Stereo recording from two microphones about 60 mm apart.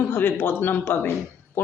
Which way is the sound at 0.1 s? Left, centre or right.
Left.